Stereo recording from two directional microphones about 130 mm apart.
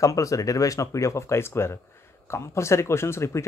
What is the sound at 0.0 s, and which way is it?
Speech, 25° left (ahead or behind).